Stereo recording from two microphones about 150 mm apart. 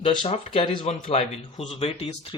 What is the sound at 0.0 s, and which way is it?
A man's voice, 35° left (ahead or behind).